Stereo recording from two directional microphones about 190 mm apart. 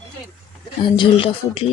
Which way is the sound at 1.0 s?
30° left (ahead or behind).